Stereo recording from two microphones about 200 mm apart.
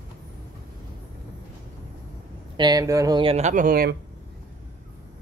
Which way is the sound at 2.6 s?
20° right (ahead or behind).